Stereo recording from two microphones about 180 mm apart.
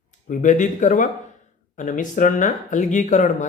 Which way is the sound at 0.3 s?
45° left (ahead or behind).